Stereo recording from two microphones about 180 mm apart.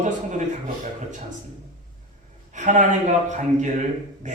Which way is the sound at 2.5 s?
45° right (ahead or behind).